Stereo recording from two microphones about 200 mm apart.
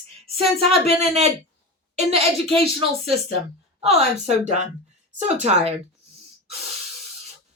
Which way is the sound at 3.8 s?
30° right (ahead or behind).